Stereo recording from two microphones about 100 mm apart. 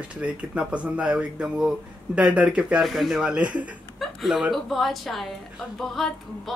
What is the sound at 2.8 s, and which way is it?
Speech, centre (ahead or behind).